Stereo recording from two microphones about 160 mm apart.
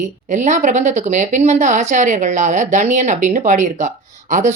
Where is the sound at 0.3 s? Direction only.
50° right (ahead or behind).